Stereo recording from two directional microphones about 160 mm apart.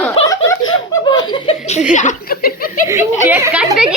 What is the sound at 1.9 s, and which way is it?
Speech, 50° left (ahead or behind).